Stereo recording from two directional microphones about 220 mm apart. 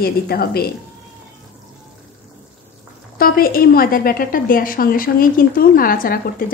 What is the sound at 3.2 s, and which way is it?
A woman's voice, 40° left (ahead or behind).